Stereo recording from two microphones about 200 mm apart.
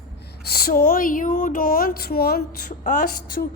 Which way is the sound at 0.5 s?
45° left (ahead or behind).